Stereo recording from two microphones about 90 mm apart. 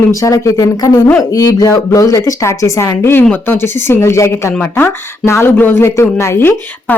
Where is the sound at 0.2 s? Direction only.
35° left (ahead or behind).